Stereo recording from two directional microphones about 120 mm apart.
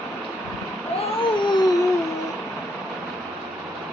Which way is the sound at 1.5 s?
35° left (ahead or behind).